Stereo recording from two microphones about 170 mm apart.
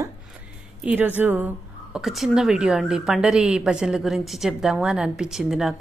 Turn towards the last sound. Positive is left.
turn(degrees=0)  # may be behind; listen again after turning